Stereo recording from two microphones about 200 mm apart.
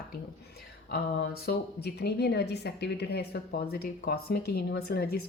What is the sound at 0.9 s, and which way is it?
A woman's voice, 50° left (ahead or behind).